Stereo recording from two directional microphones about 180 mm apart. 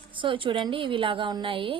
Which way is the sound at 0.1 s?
30° right (ahead or behind).